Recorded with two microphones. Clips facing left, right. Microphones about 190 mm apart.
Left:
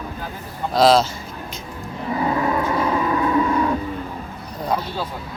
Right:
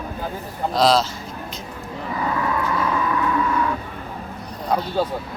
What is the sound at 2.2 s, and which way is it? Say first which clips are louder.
Vehicle: left 3 dB; 25° left (ahead or behind).